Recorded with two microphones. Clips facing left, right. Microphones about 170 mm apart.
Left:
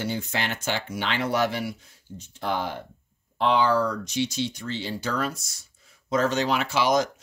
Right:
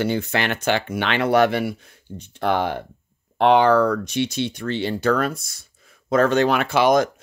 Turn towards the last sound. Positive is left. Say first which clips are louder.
# right 6 dB
turn(degrees=-55)  # may be behind; listen again after turning